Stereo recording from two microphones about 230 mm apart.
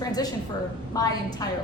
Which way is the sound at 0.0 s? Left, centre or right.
Centre.